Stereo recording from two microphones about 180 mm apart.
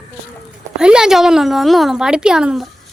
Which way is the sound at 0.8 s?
5° right (ahead or behind).